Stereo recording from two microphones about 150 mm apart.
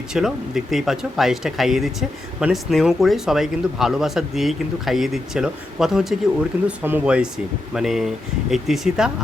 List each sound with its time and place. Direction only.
0.1 s speech: 5° right (ahead or behind)